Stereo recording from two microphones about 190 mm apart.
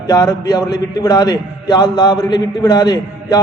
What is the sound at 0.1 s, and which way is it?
A man's voice, 20° left (ahead or behind).